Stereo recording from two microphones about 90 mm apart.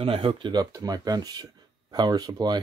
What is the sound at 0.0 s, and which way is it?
Speech, 90° right.